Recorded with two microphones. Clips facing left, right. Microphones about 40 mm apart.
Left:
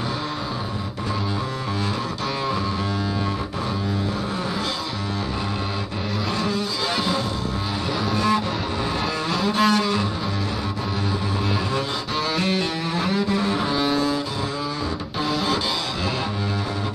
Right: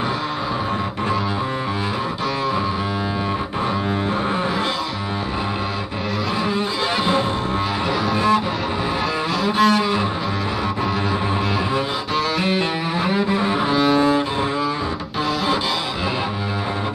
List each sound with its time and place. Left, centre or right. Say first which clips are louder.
8.1 s music: right 3 dB; centre
9.6 s cello: right 3 dB; centre
12.4 s cello: right 3 dB; centre
13.9 s cello: right 6 dB; right